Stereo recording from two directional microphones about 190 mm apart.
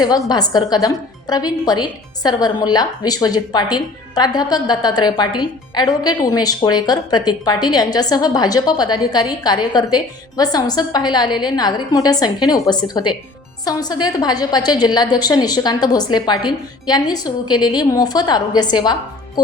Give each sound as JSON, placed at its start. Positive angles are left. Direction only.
{"t": 0.0, "sound": "a woman's voice", "side_deg": 20}